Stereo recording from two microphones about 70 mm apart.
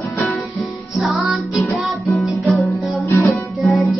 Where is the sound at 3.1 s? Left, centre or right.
Left.